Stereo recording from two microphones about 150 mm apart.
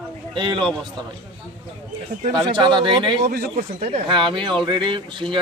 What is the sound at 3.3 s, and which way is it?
Speech, 75° right (ahead or behind).